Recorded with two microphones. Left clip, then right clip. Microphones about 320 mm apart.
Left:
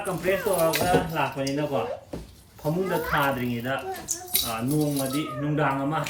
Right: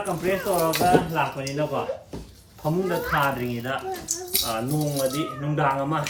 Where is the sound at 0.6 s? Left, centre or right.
Centre.